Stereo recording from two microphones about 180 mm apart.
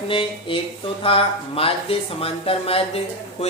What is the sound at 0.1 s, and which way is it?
Speech, 30° left (ahead or behind).